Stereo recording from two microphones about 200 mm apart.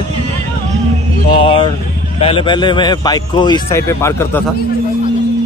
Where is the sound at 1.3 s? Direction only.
25° left (ahead or behind).